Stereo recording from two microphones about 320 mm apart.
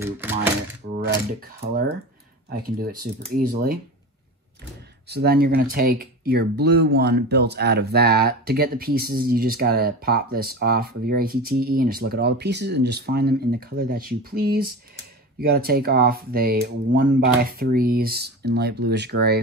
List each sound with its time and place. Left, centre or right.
0.0 s a sound: centre
0.8 s mechanisms: right
2.5 s speech: right
5.0 s speech: right